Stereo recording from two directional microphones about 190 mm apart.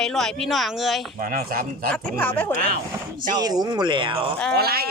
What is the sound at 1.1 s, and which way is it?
Speech, 50° right (ahead or behind).